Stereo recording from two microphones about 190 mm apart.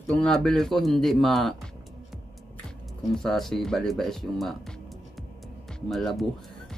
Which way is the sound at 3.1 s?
Centre (ahead or behind).